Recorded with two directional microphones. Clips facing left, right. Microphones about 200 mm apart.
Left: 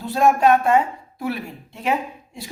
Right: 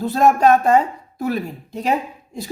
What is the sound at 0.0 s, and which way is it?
Speech, 40° right (ahead or behind).